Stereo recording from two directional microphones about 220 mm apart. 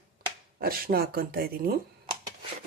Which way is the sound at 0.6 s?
40° right (ahead or behind).